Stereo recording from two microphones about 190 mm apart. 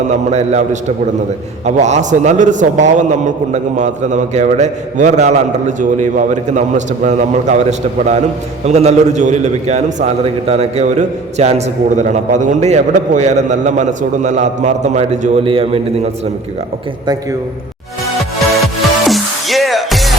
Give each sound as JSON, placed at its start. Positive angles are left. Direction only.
{"t": 0.1, "sound": "a man's voice", "side_deg": -35}
{"t": 18.2, "sound": "music", "side_deg": 0}